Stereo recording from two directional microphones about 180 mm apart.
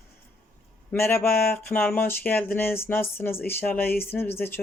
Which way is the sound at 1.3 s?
55° left (ahead or behind).